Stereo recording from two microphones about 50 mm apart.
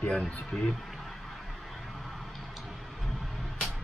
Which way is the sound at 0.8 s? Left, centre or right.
Centre.